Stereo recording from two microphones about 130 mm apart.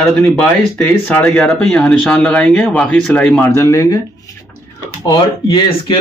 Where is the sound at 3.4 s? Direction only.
20° left (ahead or behind).